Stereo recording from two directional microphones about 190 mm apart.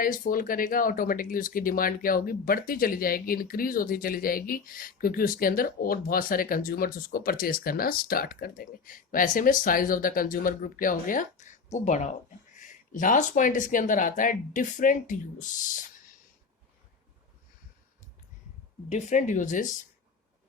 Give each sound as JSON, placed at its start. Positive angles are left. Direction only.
{"t": 0.0, "sound": "speech", "side_deg": 45}
{"t": 18.9, "sound": "speech", "side_deg": 40}